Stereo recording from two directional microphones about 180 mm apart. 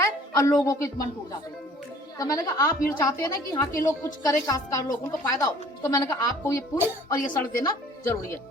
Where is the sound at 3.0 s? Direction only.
20° left (ahead or behind).